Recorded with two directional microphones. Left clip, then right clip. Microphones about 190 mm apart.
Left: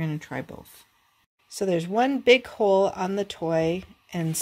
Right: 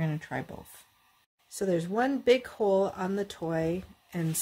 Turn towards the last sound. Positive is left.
turn(degrees=20)  # may be behind; listen again after turning